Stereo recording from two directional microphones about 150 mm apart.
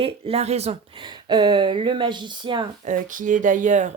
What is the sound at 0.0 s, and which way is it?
Speech, 40° right (ahead or behind).